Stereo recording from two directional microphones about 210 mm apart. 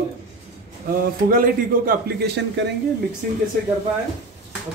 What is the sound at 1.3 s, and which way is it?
Speech, 40° right (ahead or behind).